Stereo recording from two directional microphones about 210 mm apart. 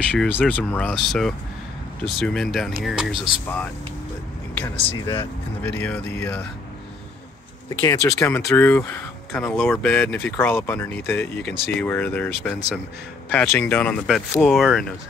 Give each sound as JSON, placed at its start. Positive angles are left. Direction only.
{"t": 0.1, "sound": "speech", "side_deg": 5}
{"t": 5.0, "sound": "speech", "side_deg": 20}
{"t": 5.6, "sound": "speech", "side_deg": 10}
{"t": 7.8, "sound": "speech", "side_deg": 15}